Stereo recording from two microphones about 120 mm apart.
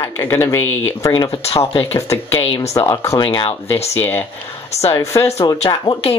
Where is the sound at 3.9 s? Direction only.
20° left (ahead or behind).